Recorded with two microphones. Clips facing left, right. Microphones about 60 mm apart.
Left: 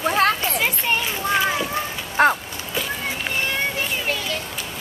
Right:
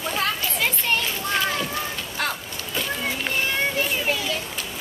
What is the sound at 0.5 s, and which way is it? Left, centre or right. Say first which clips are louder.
Children playing: left 2 dB; centre.